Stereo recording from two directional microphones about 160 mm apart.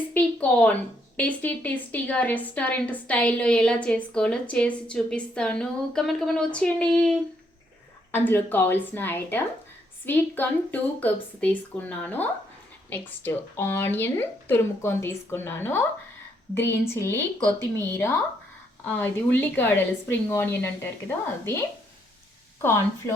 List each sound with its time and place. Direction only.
0.1 s a woman's voice: 10° left (ahead or behind)
8.1 s a woman's voice: 10° left (ahead or behind)
23.0 s speech: 20° left (ahead or behind)